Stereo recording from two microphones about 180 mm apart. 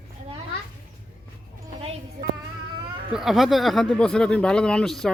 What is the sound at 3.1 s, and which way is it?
Speech, centre (ahead or behind).